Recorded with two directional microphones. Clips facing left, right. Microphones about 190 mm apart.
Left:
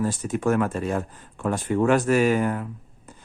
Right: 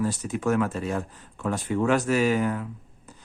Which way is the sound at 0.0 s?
50° left (ahead or behind).